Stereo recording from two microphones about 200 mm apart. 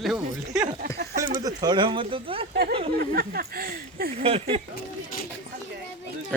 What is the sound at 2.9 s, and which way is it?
Speech, 50° right (ahead or behind).